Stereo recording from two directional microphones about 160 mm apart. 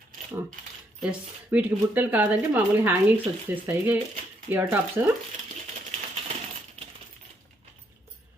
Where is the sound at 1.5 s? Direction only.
10° right (ahead or behind).